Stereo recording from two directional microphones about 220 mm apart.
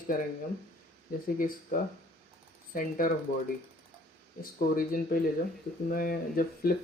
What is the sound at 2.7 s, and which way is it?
Speech, 40° left (ahead or behind).